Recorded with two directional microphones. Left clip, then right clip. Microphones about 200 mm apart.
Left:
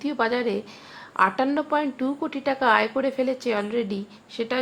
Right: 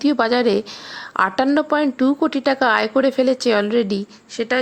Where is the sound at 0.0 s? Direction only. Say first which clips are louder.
Right 7 dB; 40° right (ahead or behind).